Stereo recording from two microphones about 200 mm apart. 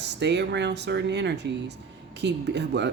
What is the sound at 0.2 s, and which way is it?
Speech, 60° right (ahead or behind).